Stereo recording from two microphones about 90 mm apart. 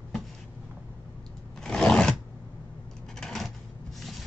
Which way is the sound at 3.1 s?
5° left (ahead or behind).